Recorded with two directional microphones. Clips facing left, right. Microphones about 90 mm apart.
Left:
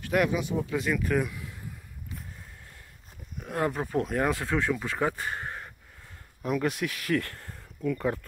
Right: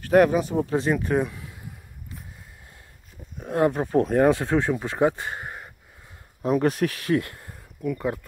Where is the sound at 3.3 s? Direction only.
25° right (ahead or behind).